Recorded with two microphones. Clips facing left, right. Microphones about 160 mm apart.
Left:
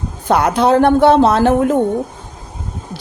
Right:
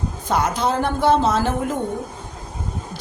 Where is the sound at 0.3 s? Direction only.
65° left (ahead or behind).